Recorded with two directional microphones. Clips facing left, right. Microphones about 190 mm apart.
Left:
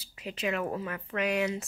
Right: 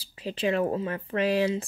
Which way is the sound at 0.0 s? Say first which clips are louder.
Right 5 dB; 30° right (ahead or behind).